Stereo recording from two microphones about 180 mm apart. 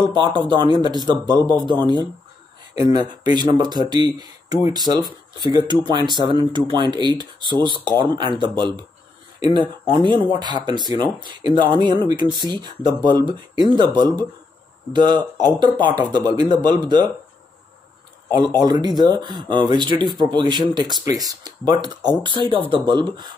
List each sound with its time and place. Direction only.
0.0 s speech: 25° right (ahead or behind)
18.3 s speech: 25° right (ahead or behind)